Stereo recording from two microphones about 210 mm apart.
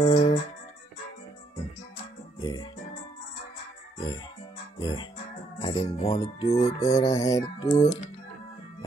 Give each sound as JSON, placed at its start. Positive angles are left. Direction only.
{"t": 0.0, "sound": "music", "side_deg": 30}
{"t": 2.4, "sound": "music", "side_deg": 20}
{"t": 4.7, "sound": "music", "side_deg": 20}
{"t": 6.9, "sound": "music", "side_deg": 15}